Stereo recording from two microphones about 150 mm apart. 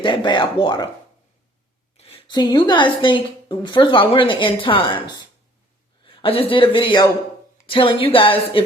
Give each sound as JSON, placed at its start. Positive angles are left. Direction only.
{"t": 0.0, "sound": "a woman's voice", "side_deg": 30}
{"t": 2.0, "sound": "a woman's voice", "side_deg": 40}